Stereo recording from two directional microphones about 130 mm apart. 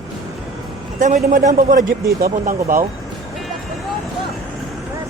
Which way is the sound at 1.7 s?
90° right.